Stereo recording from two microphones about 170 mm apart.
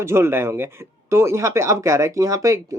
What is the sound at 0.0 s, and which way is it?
Speech, 15° right (ahead or behind).